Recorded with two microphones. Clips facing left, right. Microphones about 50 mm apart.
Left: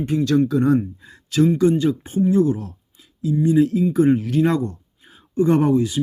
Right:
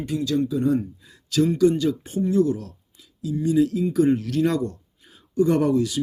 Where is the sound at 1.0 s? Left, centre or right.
Left.